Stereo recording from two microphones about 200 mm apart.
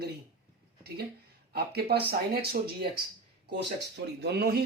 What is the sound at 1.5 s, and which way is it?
Speech, 50° right (ahead or behind).